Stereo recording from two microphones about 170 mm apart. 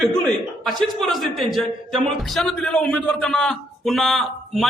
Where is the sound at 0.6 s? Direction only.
Centre (ahead or behind).